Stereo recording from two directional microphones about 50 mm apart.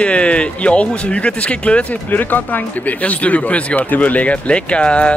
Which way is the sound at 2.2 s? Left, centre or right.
Left.